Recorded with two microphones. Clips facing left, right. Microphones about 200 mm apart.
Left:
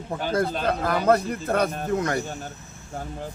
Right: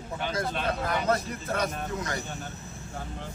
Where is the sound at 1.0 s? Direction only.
60° left (ahead or behind).